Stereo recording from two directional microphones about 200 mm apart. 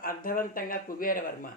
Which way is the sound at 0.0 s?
45° left (ahead or behind).